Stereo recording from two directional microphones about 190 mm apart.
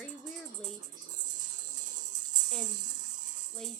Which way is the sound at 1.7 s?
40° right (ahead or behind).